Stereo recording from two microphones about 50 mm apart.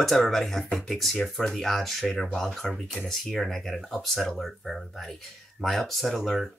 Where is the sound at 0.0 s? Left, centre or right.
Centre.